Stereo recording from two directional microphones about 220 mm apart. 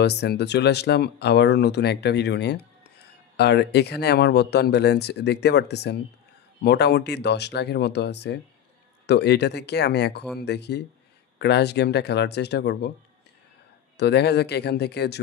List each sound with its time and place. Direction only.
0.0 s speech: 50° left (ahead or behind)
13.9 s speech: 50° left (ahead or behind)